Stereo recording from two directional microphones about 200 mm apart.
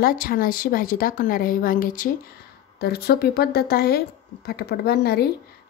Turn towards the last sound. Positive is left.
turn(degrees=50)  # may be behind; listen again after turning